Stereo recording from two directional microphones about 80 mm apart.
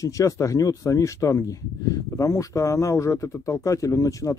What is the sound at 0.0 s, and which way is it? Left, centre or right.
Speech, left.